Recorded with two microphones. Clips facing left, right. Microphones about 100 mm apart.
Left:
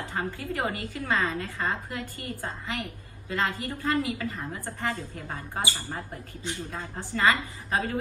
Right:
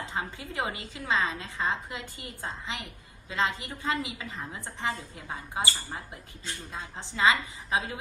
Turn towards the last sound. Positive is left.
turn(degrees=-15)  # may be behind; listen again after turning